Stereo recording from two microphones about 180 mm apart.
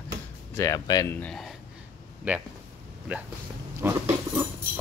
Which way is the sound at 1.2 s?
Centre (ahead or behind).